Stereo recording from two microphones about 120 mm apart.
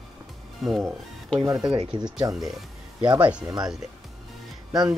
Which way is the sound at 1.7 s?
35° right (ahead or behind).